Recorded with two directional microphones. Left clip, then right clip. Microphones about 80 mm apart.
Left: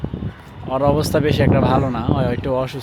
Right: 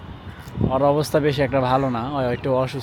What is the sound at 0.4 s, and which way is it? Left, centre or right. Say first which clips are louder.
Speech: even; centre.